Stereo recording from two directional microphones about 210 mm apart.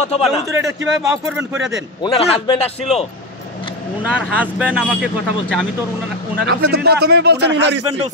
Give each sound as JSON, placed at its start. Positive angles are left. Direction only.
{"t": 0.1, "sound": "a man's voice", "side_deg": 30}
{"t": 0.9, "sound": "speech", "side_deg": -5}
{"t": 2.0, "sound": "a man's voice", "side_deg": 30}
{"t": 4.0, "sound": "speech", "side_deg": -5}
{"t": 6.3, "sound": "speech", "side_deg": -50}